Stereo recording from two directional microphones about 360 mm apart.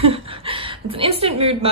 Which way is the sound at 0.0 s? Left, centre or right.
Centre.